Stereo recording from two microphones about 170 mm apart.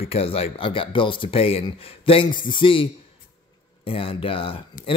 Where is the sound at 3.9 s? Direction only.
30° left (ahead or behind).